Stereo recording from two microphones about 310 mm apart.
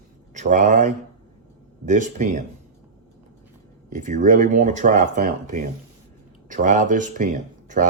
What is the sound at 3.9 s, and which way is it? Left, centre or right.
Speech, right.